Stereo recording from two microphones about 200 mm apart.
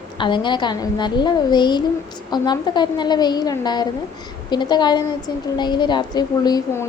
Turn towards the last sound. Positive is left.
turn(degrees=20)  # may be behind; listen again after turning